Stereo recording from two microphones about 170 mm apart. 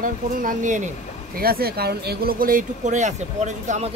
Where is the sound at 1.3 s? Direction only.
65° right (ahead or behind).